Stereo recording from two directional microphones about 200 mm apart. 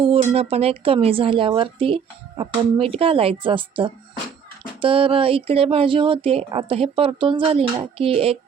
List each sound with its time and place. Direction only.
0.0 s speech: 30° right (ahead or behind)